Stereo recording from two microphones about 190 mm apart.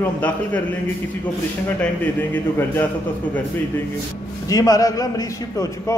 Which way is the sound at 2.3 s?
10° left (ahead or behind).